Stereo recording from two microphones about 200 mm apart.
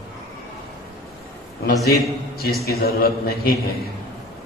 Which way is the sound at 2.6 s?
50° left (ahead or behind).